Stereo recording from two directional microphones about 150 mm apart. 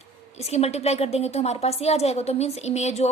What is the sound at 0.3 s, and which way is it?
A woman's voice, 45° left (ahead or behind).